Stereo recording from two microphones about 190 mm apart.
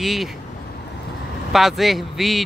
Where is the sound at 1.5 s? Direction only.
Centre (ahead or behind).